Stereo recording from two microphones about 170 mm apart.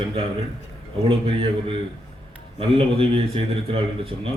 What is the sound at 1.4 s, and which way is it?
A man's voice, 30° right (ahead or behind).